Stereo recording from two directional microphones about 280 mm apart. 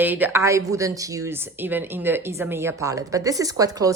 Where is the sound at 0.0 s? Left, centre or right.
Centre.